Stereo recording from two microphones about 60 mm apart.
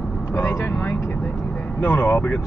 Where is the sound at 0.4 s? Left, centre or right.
Left.